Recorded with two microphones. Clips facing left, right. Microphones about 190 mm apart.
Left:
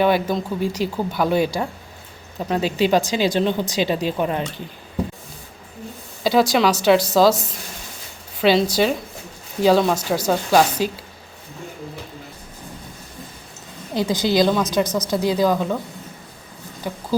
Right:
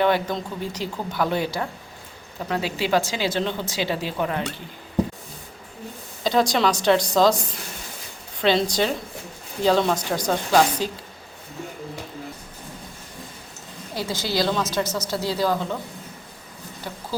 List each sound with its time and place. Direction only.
0.0 s a woman's voice: 10° left (ahead or behind)
6.2 s a woman's voice: 5° left (ahead or behind)
13.9 s a woman's voice: 20° left (ahead or behind)